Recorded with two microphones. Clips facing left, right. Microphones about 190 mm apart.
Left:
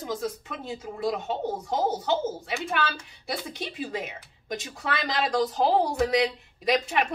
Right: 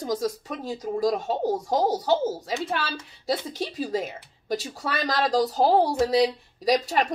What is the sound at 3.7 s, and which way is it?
A woman's voice, 40° right (ahead or behind).